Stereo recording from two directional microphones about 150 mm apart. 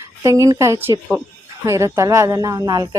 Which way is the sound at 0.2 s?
20° right (ahead or behind).